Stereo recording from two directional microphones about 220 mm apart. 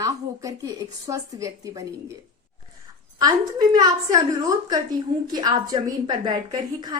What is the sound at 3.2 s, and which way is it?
A woman's voice, 20° right (ahead or behind).